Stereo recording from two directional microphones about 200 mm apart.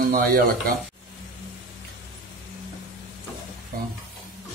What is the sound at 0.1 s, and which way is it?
Speech, 45° right (ahead or behind).